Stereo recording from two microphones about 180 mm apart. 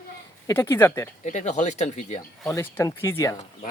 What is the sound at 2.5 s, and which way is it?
Speech, 15° left (ahead or behind).